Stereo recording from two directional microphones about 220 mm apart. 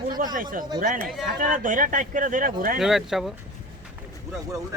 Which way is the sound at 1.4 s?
40° right (ahead or behind).